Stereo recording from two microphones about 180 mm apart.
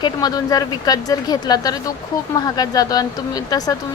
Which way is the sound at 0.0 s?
20° left (ahead or behind).